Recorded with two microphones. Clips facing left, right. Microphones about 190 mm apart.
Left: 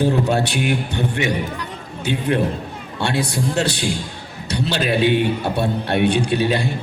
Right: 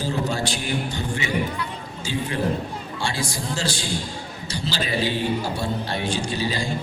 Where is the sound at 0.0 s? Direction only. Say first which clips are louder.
Left 7 dB; 65° left (ahead or behind).